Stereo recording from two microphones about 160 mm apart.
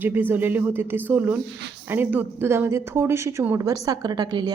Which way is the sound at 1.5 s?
90° right.